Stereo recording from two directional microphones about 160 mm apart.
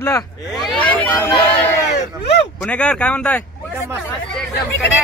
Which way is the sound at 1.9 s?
90° left.